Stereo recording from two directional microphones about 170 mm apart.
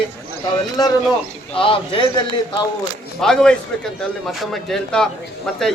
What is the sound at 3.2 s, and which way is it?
A man's voice, 5° left (ahead or behind).